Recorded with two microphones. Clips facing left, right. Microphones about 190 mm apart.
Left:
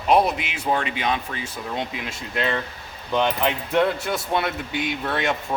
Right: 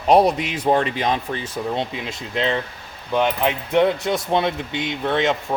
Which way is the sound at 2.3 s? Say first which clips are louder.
Right 3 dB; 20° right (ahead or behind).